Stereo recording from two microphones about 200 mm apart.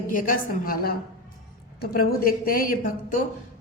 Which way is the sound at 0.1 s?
40° left (ahead or behind).